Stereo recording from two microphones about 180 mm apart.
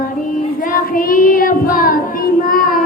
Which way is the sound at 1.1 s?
50° left (ahead or behind).